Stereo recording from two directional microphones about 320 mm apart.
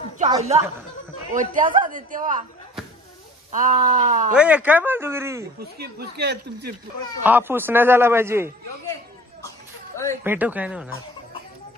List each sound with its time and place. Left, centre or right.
0.2 s a man's voice: centre
3.5 s a man's voice: right
4.3 s speech: centre
5.6 s a man's voice: right
7.2 s a man's voice: centre
10.2 s speech: centre